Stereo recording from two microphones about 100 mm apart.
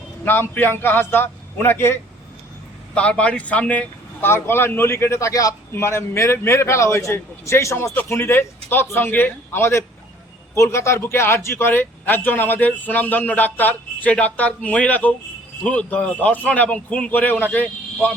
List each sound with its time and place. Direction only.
0.3 s speech: 20° left (ahead or behind)
2.9 s speech: 10° left (ahead or behind)